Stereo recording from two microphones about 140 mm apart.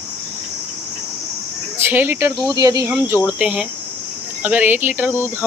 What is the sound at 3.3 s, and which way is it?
Speech, 5° right (ahead or behind).